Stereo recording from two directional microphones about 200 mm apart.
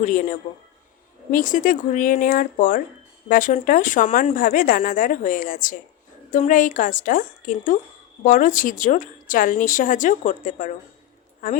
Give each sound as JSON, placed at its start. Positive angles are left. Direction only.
{"t": 0.0, "sound": "speech", "side_deg": 40}